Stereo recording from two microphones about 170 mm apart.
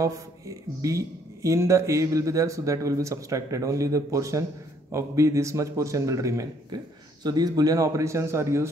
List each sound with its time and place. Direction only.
0.0 s a man's voice: 20° right (ahead or behind)